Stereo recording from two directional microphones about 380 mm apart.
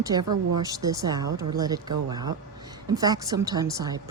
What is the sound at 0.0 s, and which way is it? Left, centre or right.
Speech, centre.